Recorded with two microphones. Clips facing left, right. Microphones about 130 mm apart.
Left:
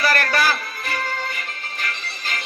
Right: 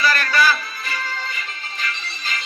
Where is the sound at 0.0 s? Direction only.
55° left (ahead or behind).